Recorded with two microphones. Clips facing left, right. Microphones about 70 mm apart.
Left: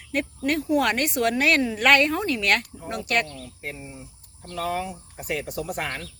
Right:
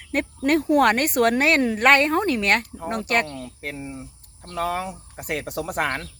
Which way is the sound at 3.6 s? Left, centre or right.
Right.